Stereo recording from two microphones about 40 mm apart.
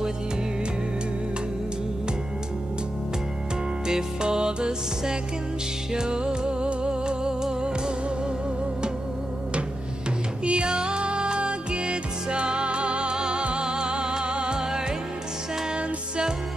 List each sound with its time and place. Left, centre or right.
3.8 s music: centre
10.4 s music: right